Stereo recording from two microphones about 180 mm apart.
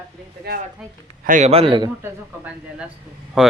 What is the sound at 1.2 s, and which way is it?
Speech, 45° right (ahead or behind).